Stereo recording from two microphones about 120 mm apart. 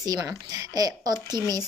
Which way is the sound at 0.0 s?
30° right (ahead or behind).